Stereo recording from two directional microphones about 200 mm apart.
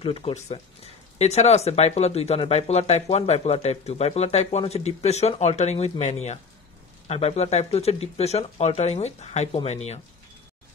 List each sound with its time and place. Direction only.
0.0 s speech: 30° left (ahead or behind)